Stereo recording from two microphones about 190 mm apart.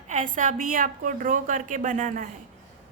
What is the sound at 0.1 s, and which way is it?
A woman's voice, 45° right (ahead or behind).